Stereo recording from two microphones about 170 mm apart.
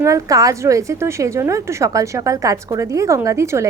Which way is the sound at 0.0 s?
20° right (ahead or behind).